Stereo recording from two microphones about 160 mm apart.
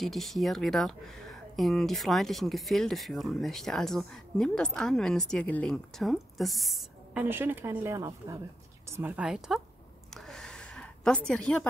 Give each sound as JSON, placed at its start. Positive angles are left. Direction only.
{"t": 0.0, "sound": "speech", "side_deg": 0}
{"t": 7.2, "sound": "speech", "side_deg": -15}
{"t": 10.1, "sound": "a sound", "side_deg": 0}